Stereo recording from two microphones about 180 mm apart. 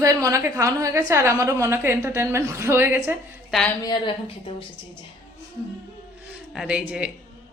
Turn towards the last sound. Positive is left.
turn(degrees=-5)  # may be behind; listen again after turning